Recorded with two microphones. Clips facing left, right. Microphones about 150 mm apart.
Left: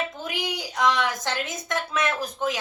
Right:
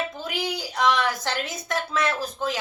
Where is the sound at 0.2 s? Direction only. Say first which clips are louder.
Right 1 dB; 20° left (ahead or behind).